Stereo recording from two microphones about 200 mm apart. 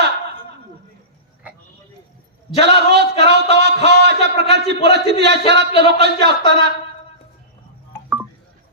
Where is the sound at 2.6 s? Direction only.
60° right (ahead or behind).